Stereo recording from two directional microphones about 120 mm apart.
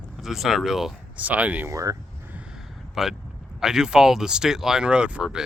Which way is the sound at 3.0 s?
Centre (ahead or behind).